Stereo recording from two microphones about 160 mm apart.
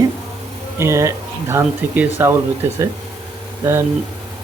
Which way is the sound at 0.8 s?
15° right (ahead or behind).